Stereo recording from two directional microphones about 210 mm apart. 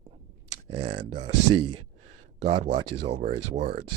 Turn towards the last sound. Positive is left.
turn(degrees=-35)  # may be behind; listen again after turning